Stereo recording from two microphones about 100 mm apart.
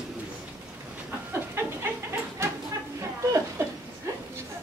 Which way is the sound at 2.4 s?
30° right (ahead or behind).